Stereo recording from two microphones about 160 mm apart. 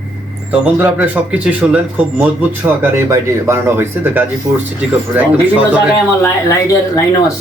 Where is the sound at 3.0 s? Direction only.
15° right (ahead or behind).